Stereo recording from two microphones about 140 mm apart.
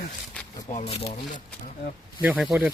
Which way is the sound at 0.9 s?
45° left (ahead or behind).